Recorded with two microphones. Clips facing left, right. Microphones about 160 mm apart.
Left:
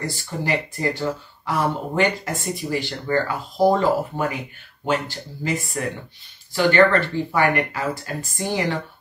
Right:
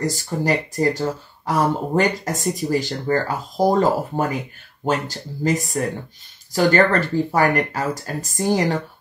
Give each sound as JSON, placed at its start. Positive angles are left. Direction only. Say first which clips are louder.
{"t": 0.0, "sound": "speech", "louder": "right 5 dB", "side_deg": -40}